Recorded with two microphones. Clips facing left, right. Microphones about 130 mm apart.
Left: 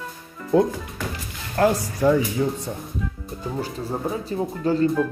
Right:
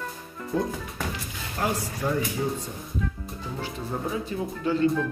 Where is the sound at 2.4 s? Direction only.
90° left.